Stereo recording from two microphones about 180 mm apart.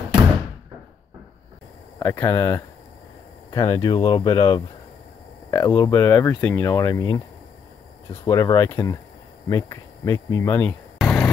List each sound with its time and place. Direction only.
2.0 s speech: 15° left (ahead or behind)
8.3 s speech: 20° left (ahead or behind)
11.0 s a sound: 5° left (ahead or behind)